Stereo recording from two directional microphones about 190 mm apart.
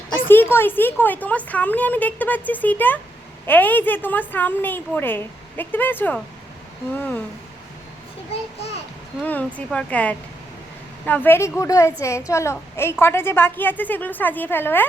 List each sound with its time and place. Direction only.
0.3 s a woman's voice: 10° left (ahead or behind)
9.2 s a woman's voice: 10° left (ahead or behind)